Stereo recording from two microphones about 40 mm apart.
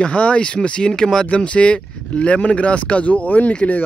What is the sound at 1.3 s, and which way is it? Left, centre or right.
Speech, left.